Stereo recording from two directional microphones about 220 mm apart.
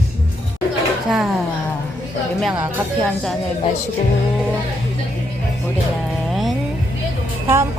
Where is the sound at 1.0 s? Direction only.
Centre (ahead or behind).